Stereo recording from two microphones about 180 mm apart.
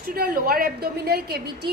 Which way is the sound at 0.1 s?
55° right (ahead or behind).